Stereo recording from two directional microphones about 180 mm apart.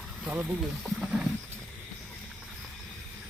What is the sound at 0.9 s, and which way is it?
Wild animals, 5° right (ahead or behind).